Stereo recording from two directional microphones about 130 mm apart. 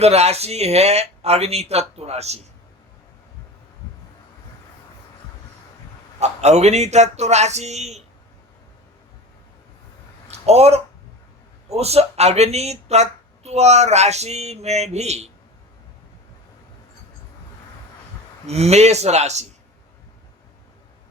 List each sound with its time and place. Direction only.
0.0 s speech: 55° right (ahead or behind)
6.1 s a woman's voice: 60° right (ahead or behind)
10.3 s a woman's voice: 55° right (ahead or behind)
18.4 s a woman's voice: 55° right (ahead or behind)